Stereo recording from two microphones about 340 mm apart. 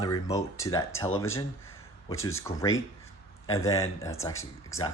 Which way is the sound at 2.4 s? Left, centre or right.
Centre.